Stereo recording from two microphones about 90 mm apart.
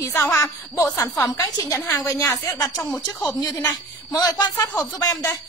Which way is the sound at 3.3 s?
45° left (ahead or behind).